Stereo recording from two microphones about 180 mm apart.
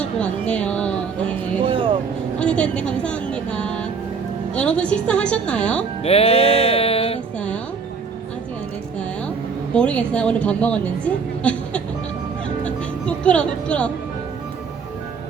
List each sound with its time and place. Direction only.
0.0 s music: 5° left (ahead or behind)
1.6 s vehicle: 30° right (ahead or behind)
2.4 s music: 5° left (ahead or behind)
4.5 s a woman's voice: 5° left (ahead or behind)
6.0 s music: 35° left (ahead or behind)
7.3 s music: 5° left (ahead or behind)
9.7 s a woman's voice: 5° left (ahead or behind)
12.6 s music: 5° left (ahead or behind)